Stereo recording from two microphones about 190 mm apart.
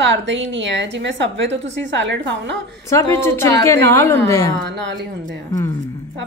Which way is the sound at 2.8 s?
15° left (ahead or behind).